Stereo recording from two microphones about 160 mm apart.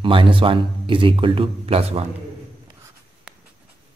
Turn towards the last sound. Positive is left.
turn(degrees=-5)  # may be behind; listen again after turning